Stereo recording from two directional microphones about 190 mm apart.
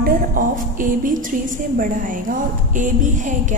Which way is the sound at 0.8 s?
45° right (ahead or behind).